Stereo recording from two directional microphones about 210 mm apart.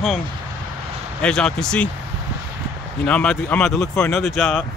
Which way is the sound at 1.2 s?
5° left (ahead or behind).